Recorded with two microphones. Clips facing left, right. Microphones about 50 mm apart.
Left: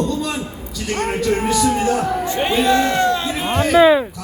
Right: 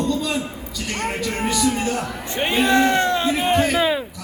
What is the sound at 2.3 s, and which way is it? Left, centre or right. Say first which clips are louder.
Speech: even; right.